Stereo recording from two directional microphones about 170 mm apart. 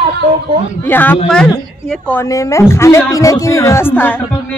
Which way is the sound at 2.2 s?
20° left (ahead or behind).